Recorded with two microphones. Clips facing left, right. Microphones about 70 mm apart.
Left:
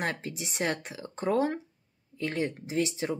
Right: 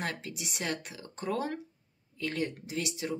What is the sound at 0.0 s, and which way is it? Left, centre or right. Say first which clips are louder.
Speech: left 4 dB; left.